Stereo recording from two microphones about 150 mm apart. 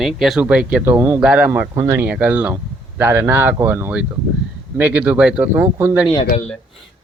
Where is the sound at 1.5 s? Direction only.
20° right (ahead or behind).